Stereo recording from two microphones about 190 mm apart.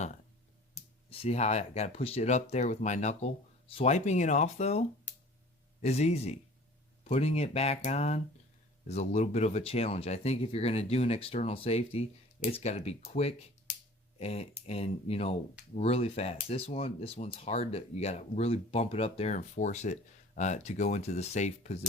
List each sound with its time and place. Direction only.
1.2 s speech: 35° left (ahead or behind)